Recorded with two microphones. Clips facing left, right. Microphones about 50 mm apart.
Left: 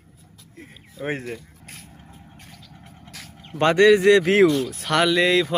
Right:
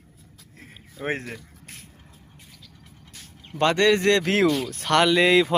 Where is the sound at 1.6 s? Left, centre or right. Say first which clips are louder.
Left 2 dB; left.